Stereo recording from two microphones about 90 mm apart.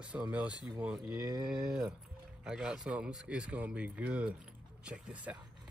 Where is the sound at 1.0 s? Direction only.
50° right (ahead or behind).